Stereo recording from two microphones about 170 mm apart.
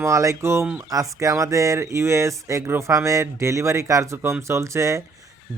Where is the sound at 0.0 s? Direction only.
20° right (ahead or behind).